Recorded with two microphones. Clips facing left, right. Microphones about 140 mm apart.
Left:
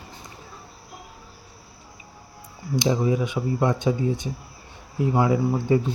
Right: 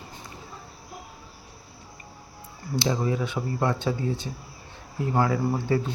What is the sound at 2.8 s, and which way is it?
Speech, 15° left (ahead or behind).